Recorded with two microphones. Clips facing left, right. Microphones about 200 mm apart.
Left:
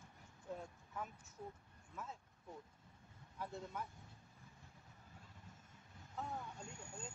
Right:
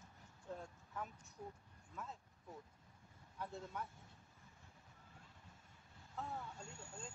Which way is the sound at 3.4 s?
Centre (ahead or behind).